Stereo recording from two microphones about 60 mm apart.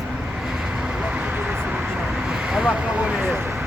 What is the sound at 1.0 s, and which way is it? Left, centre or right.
Vehicle, right.